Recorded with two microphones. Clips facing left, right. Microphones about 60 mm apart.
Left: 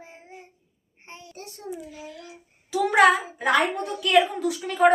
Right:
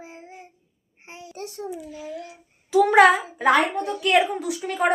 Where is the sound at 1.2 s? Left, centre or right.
Right.